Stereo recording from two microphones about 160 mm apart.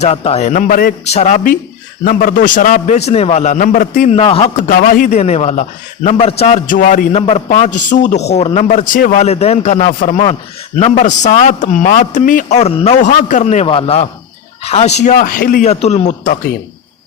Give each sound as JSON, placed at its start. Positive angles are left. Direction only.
{"t": 0.0, "sound": "a man's voice", "side_deg": 40}
{"t": 1.0, "sound": "a man's voice", "side_deg": 45}
{"t": 2.0, "sound": "a man's voice", "side_deg": 60}
{"t": 4.1, "sound": "a man's voice", "side_deg": 35}
{"t": 4.7, "sound": "speech", "side_deg": 60}
{"t": 5.2, "sound": "a man's voice", "side_deg": 40}
{"t": 6.7, "sound": "speech", "side_deg": 55}
{"t": 7.2, "sound": "a man's voice", "side_deg": 40}
{"t": 7.4, "sound": "a man's voice", "side_deg": 50}
{"t": 15.7, "sound": "a man's voice", "side_deg": 40}